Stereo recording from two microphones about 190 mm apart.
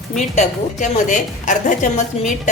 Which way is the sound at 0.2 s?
40° left (ahead or behind).